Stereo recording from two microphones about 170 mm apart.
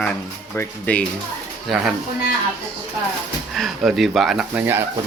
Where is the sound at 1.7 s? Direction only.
Centre (ahead or behind).